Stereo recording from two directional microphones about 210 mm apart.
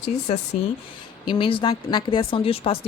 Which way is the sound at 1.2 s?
25° left (ahead or behind).